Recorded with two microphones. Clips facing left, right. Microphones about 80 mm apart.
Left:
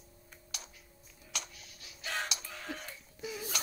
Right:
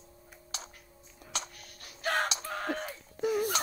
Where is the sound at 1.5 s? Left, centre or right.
Right.